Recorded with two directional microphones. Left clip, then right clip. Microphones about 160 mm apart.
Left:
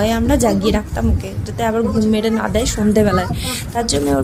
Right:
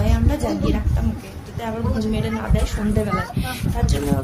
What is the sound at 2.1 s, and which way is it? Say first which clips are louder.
A woman's voice: left 8 dB; 45° left (ahead or behind).